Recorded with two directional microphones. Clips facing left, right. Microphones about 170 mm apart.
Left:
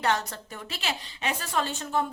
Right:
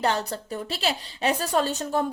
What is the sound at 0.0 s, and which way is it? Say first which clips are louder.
A woman's voice: right 2 dB; 30° right (ahead or behind).